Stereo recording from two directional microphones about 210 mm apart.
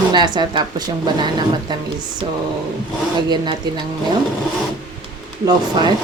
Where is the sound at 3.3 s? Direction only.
20° right (ahead or behind).